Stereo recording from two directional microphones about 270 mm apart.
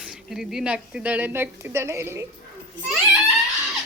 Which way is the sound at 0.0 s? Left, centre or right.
Centre.